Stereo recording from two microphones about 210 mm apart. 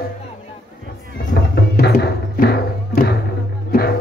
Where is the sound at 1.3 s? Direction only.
50° left (ahead or behind).